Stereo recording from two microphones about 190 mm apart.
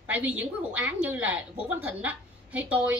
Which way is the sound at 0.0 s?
5° right (ahead or behind).